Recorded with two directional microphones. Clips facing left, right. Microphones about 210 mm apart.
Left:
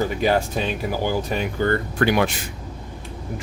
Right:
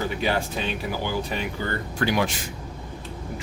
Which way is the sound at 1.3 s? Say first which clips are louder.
Left 5 dB; 45° left (ahead or behind).